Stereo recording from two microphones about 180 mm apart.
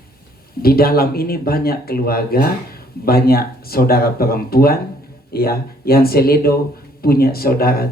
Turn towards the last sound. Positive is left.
turn(degrees=55)  # may be behind; listen again after turning